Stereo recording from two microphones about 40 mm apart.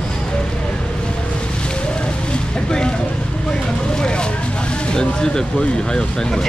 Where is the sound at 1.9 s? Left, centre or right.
Left.